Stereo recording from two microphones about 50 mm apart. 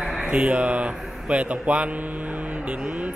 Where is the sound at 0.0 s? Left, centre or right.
Centre.